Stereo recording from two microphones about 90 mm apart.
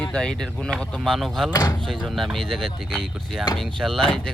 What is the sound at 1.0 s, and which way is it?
Speech, centre (ahead or behind).